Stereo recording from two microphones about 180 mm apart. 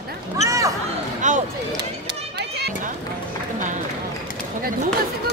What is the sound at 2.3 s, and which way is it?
Run, 65° right (ahead or behind).